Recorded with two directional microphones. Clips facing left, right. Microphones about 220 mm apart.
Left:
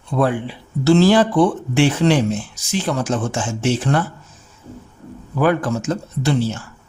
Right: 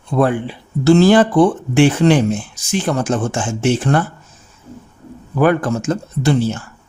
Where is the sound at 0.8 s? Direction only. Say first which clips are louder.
Right 3 dB; 50° right (ahead or behind).